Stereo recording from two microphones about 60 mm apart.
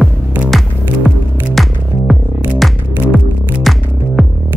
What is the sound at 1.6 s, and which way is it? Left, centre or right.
Music, centre.